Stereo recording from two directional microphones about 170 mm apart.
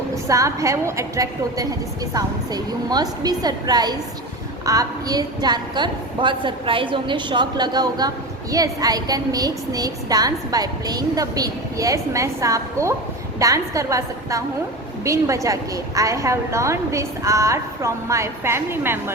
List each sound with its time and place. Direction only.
0.3 s a woman's voice: 20° right (ahead or behind)